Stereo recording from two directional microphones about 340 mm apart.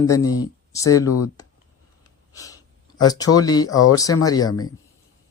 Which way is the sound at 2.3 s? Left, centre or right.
Centre.